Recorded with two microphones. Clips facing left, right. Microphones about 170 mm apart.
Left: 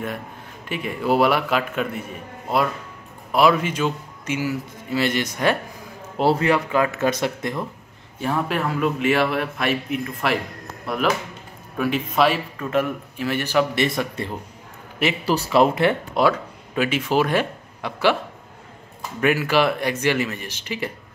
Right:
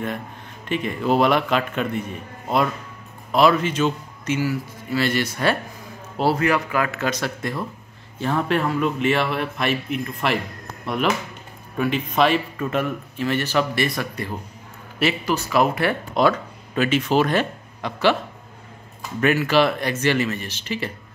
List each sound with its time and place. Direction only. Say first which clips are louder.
0.7 s a man's voice: right 1 dB; 10° left (ahead or behind)
3.3 s a man's voice: even; 10° left (ahead or behind)
8.2 s a man's voice: right 2 dB; 5° left (ahead or behind)
11.8 s a man's voice: even; 5° left (ahead or behind)
13.8 s speech: left 2 dB; 25° left (ahead or behind)
16.2 s speech: right 3 dB; 10° left (ahead or behind)
19.2 s a man's voice: right 1 dB; 10° left (ahead or behind)